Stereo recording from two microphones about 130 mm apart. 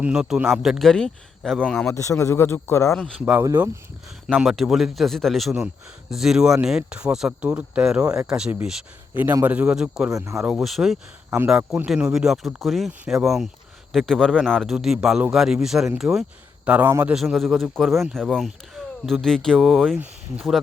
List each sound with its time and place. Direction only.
0.0 s a man's voice: 5° right (ahead or behind)
1.9 s a man's voice: 20° left (ahead or behind)
3.2 s a man's voice: 10° right (ahead or behind)
4.4 s a man's voice: centre (ahead or behind)
10.1 s speech: 25° right (ahead or behind)
10.3 s a man's voice: centre (ahead or behind)
17.3 s a man's voice: centre (ahead or behind)